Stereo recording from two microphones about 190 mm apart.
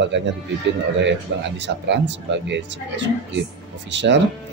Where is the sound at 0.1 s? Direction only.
70° right (ahead or behind).